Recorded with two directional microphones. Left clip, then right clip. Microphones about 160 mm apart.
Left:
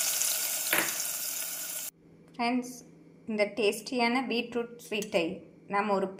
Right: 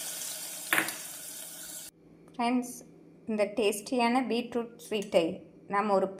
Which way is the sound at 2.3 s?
15° right (ahead or behind).